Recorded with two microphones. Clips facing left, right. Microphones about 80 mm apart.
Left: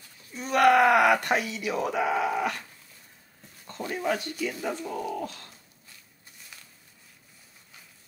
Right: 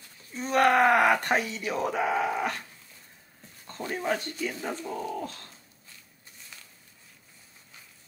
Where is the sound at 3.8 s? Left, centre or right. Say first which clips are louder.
Left 1 dB; right.